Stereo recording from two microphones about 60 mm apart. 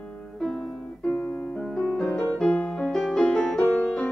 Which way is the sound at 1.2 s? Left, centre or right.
Left.